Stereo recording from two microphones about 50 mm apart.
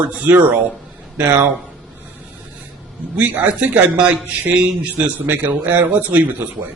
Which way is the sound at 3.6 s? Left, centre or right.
Right.